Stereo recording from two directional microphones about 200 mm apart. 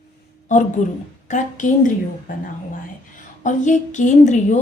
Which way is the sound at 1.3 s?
40° left (ahead or behind).